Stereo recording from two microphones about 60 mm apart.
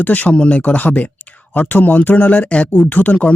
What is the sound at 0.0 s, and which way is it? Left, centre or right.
Speech, left.